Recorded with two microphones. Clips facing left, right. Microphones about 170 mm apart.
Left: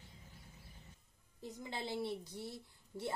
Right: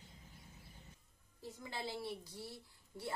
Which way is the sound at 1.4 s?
20° left (ahead or behind).